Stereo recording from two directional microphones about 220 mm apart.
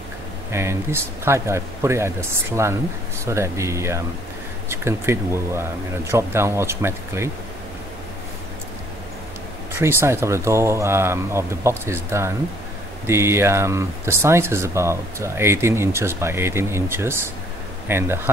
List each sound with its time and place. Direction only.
0.5 s speech: 10° right (ahead or behind)
9.8 s speech: 10° right (ahead or behind)